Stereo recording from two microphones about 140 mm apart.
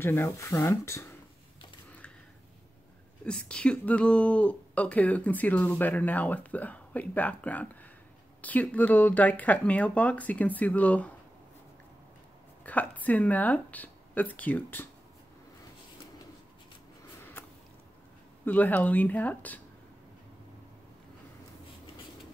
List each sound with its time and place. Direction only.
0.0 s speech: 15° left (ahead or behind)
1.9 s a sound: 10° left (ahead or behind)
3.3 s speech: 5° left (ahead or behind)
12.6 s speech: 10° left (ahead or behind)
17.2 s a sound: 15° left (ahead or behind)
18.4 s speech: 10° left (ahead or behind)